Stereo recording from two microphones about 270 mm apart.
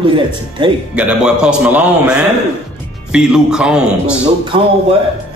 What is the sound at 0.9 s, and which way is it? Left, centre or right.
A man's voice, centre.